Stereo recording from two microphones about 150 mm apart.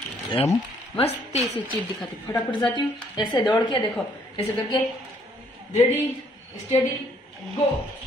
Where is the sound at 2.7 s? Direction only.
30° left (ahead or behind).